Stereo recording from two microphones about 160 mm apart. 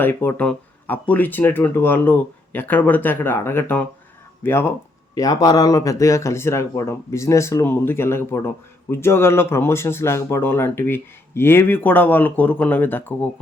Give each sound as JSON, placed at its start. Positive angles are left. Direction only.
{"t": 0.0, "sound": "speech", "side_deg": 10}